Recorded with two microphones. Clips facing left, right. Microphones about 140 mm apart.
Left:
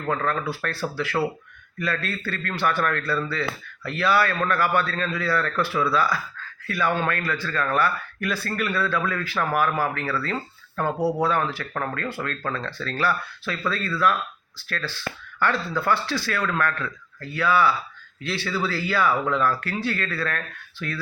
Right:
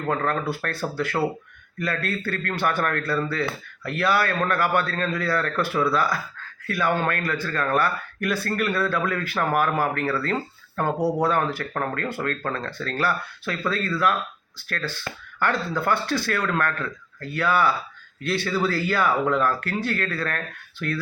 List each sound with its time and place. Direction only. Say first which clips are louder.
0.1 s speech: even; 50° right (ahead or behind)
1.8 s speech: right 1 dB; 50° right (ahead or behind)